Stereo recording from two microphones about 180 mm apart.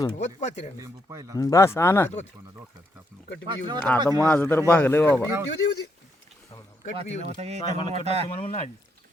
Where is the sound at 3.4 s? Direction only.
25° right (ahead or behind).